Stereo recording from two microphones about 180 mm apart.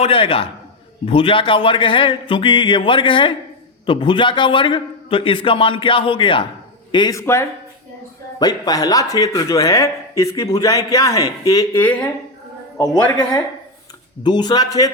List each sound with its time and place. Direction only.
0.0 s a man's voice: 30° left (ahead or behind)